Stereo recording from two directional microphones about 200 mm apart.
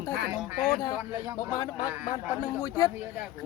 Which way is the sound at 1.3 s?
20° left (ahead or behind).